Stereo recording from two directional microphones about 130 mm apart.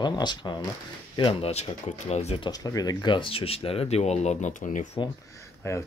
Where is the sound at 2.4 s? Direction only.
30° left (ahead or behind); by 4.8 s 80° left.